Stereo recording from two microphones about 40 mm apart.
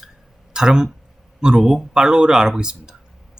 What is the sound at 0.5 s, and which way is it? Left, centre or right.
Speech, centre.